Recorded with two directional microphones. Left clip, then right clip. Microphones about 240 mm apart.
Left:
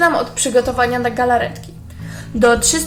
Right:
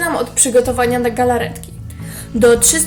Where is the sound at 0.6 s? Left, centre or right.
Right.